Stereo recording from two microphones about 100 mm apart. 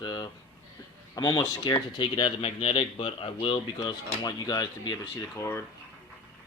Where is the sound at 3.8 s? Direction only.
45° left (ahead or behind).